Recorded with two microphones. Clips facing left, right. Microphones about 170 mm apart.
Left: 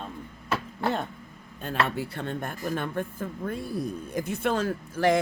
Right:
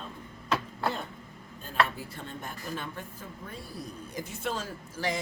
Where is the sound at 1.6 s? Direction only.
70° left (ahead or behind).